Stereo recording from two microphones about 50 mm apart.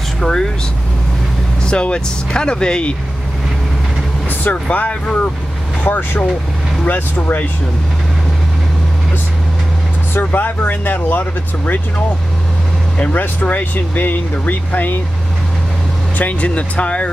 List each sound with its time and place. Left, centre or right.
0.2 s speech: centre
1.7 s speech: centre
4.6 s speech: left
10.1 s speech: left
13.0 s speech: left
16.2 s speech: left